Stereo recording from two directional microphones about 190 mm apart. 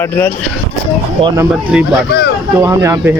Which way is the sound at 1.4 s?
5° right (ahead or behind).